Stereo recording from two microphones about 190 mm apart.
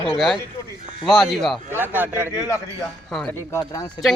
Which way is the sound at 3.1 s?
Centre (ahead or behind).